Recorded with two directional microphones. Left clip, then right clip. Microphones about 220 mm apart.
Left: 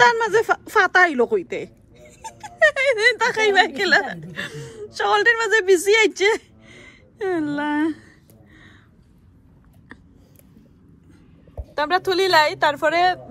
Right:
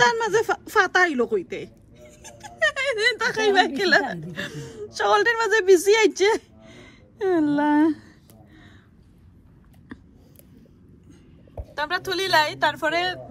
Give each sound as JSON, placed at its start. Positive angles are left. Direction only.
{"t": 0.0, "sound": "speech", "side_deg": -15}
{"t": 11.7, "sound": "a woman's voice", "side_deg": -15}